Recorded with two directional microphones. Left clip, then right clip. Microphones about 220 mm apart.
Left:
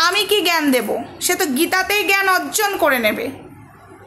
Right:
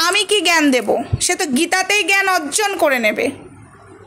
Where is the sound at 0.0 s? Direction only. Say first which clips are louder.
Right 1 dB; 30° right (ahead or behind).